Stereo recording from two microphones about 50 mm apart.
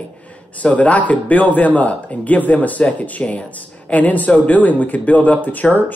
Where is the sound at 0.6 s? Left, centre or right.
Left.